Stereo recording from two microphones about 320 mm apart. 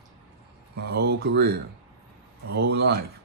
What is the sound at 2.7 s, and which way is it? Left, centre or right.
Speech, right.